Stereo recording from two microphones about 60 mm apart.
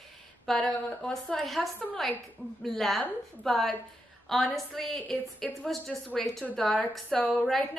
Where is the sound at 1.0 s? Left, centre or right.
Centre.